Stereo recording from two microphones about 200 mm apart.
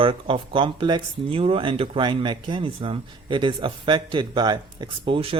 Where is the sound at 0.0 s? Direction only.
25° right (ahead or behind).